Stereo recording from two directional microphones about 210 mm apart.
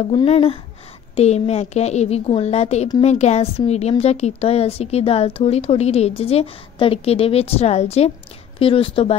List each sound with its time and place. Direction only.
0.1 s a woman's voice: 25° left (ahead or behind)